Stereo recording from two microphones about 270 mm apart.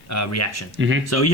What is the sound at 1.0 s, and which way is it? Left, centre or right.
Speech, left.